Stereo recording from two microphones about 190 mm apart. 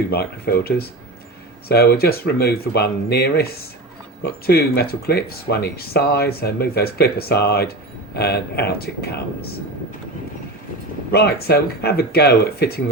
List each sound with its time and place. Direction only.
0.1 s speech: 55° left (ahead or behind)
11.1 s speech: 55° left (ahead or behind)